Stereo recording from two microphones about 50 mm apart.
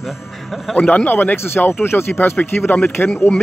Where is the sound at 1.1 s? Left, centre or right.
Left.